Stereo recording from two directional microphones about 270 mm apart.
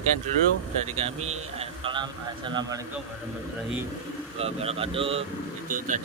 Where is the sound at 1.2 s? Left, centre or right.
Right.